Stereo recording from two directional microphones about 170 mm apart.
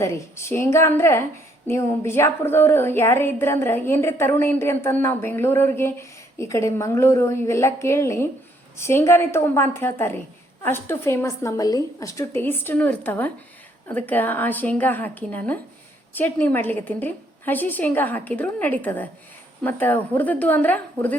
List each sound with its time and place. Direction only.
0.0 s speech: 15° left (ahead or behind)